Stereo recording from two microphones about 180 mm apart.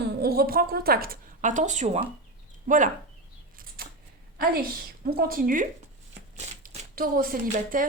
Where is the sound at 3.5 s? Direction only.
55° right (ahead or behind).